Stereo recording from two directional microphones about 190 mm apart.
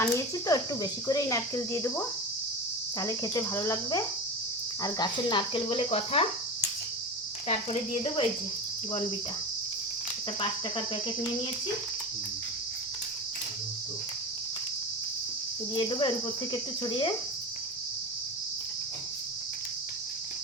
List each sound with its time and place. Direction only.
0.0 s speech: 20° left (ahead or behind)
3.0 s cricket: 15° left (ahead or behind)
4.8 s speech: 25° left (ahead or behind)
7.4 s speech: 35° left (ahead or behind)
10.8 s speech: 25° left (ahead or behind)
15.7 s speech: 25° left (ahead or behind)